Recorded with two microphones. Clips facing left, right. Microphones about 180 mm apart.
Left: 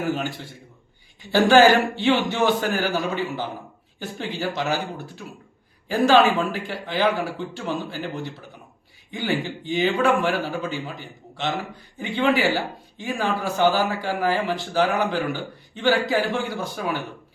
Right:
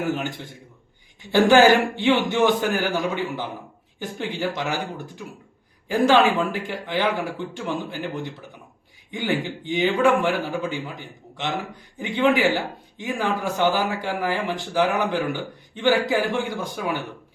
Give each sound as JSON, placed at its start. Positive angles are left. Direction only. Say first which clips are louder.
{"t": 0.1, "sound": "a man's voice", "louder": "even", "side_deg": -20}